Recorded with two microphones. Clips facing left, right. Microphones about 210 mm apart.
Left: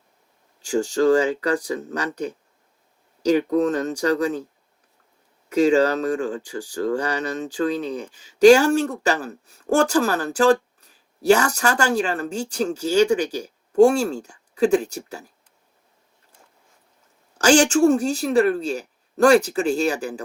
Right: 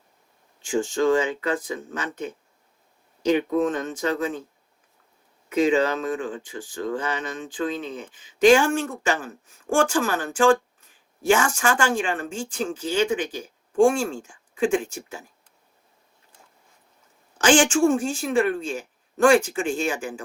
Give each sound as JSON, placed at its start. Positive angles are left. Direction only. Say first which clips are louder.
{"t": 0.6, "sound": "speech", "louder": "left 3 dB", "side_deg": 40}
{"t": 5.5, "sound": "speech", "louder": "left 3 dB", "side_deg": 40}
{"t": 17.3, "sound": "speech", "louder": "left 2 dB", "side_deg": 40}